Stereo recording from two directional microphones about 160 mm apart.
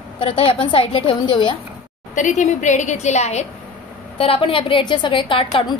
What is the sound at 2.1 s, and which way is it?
A woman's voice, 50° left (ahead or behind).